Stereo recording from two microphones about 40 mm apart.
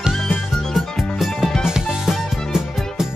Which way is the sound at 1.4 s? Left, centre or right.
Centre.